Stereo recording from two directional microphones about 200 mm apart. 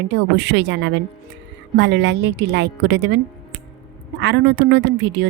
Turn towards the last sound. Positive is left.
turn(degrees=-60)  # may be behind; listen again after turning